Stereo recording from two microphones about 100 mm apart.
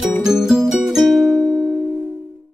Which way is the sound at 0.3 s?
5° right (ahead or behind).